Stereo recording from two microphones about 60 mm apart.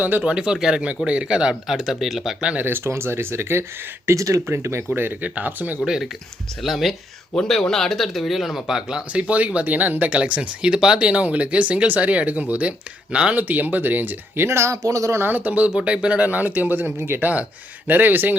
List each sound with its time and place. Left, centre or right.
0.0 s speech: right
0.3 s speech: centre
1.7 s speech: centre
2.4 s speech: centre
2.6 s speech: right
4.2 s speech: right
4.4 s speech: right
4.9 s speech: right
5.8 s speech: centre
9.2 s speech: right
13.5 s speech: right
14.4 s speech: right
15.2 s speech: right